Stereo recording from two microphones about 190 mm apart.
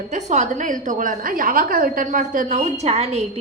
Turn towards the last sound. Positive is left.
turn(degrees=-35)  # may be behind; listen again after turning